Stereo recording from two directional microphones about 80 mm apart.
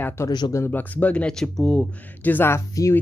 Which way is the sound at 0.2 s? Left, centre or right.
Left.